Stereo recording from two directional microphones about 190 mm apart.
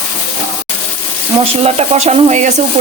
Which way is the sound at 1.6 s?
35° right (ahead or behind).